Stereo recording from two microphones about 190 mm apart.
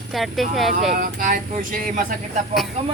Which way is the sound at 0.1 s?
Centre (ahead or behind).